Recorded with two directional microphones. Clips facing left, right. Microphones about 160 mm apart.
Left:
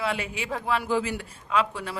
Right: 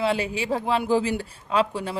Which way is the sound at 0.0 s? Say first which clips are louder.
Right 5 dB; 30° right (ahead or behind).